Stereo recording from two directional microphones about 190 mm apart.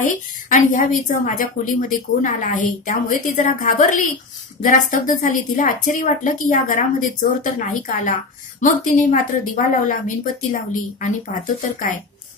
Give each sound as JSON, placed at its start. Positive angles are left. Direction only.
{"t": 0.0, "sound": "a woman's voice", "side_deg": 45}